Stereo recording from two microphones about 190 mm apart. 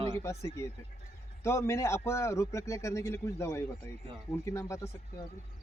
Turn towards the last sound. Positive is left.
turn(degrees=15)  # may be behind; listen again after turning